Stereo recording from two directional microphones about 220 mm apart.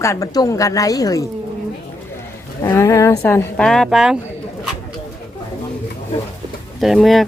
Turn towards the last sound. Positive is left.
turn(degrees=0)  # may be behind; listen again after turning